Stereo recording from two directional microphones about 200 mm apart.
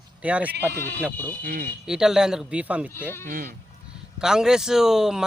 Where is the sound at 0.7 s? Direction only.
10° left (ahead or behind).